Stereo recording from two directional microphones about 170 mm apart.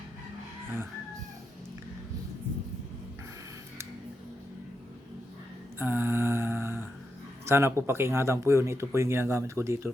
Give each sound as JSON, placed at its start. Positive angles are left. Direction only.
{"t": 5.8, "sound": "mantra", "side_deg": -10}
{"t": 7.4, "sound": "speech", "side_deg": -15}